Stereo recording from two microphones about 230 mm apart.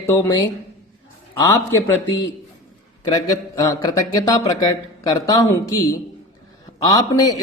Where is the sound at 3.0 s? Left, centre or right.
Centre.